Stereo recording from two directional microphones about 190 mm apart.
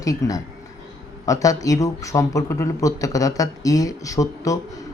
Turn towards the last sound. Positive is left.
turn(degrees=15)  # may be behind; listen again after turning